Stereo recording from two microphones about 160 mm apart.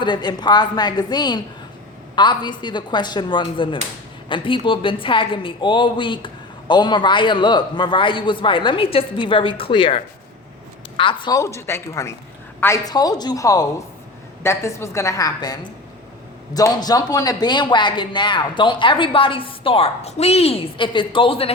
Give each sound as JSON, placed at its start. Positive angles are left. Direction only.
{"t": 0.0, "sound": "a woman's voice", "side_deg": 30}
{"t": 16.6, "sound": "a woman's voice", "side_deg": 25}